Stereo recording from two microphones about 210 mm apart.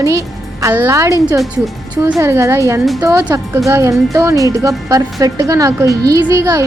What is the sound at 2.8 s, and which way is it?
Speech, centre (ahead or behind).